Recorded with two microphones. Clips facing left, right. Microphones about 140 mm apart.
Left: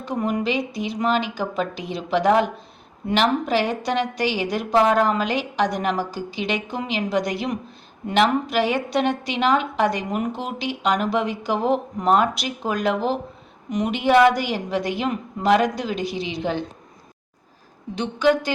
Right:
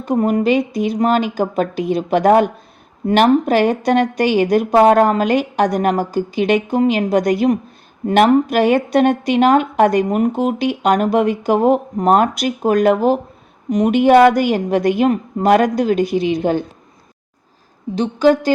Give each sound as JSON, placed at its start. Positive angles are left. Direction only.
{"t": 0.0, "sound": "a woman's voice", "side_deg": -45}
{"t": 17.9, "sound": "a woman's voice", "side_deg": -35}